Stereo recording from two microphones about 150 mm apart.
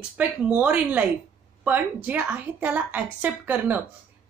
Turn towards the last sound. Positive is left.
turn(degrees=-10)  # may be behind; listen again after turning